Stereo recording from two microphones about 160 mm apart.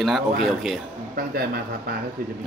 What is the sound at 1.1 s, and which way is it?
Speech, 70° right (ahead or behind).